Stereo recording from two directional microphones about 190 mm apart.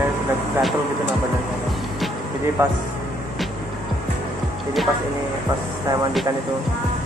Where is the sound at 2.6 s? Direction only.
10° right (ahead or behind).